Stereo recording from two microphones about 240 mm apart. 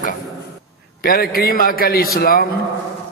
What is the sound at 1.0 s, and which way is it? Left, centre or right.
A man's voice, left.